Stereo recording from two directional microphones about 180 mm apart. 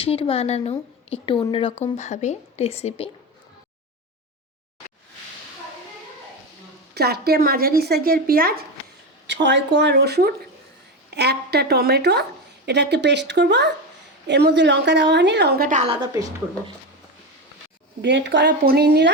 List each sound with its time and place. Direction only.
0.0 s speech: 30° left (ahead or behind)
6.9 s speech: 60° right (ahead or behind)
9.2 s a woman's voice: 80° right; by 15.8 s 55° right (ahead or behind)
15.8 s a woman's voice: 30° right (ahead or behind)
18.0 s a woman's voice: 75° right (ahead or behind)